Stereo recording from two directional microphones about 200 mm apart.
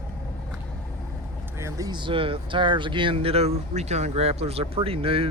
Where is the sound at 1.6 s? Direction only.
20° right (ahead or behind).